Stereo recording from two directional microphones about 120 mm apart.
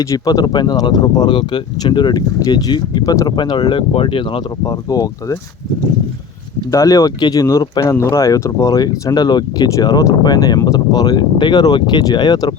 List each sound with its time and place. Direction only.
0.0 s speech: 30° left (ahead or behind)
4.6 s speech: 30° left (ahead or behind)
6.7 s speech: 25° left (ahead or behind)